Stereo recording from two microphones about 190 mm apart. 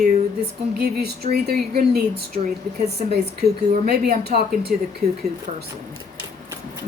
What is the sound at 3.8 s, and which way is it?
Speech, 55° right (ahead or behind).